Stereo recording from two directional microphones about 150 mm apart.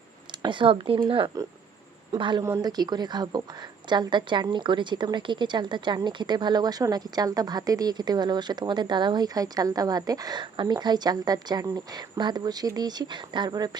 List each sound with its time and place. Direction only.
0.3 s a woman's voice: 30° right (ahead or behind)